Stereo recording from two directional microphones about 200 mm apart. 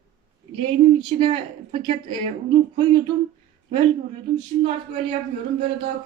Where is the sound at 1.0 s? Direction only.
25° right (ahead or behind).